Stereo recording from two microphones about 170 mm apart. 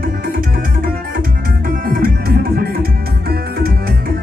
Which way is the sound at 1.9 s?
60° right (ahead or behind).